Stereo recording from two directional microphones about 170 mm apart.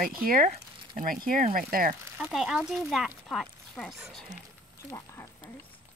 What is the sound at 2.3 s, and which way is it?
Speech, centre (ahead or behind).